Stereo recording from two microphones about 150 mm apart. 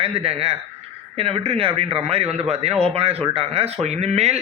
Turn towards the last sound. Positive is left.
turn(degrees=-45)  # may be behind; listen again after turning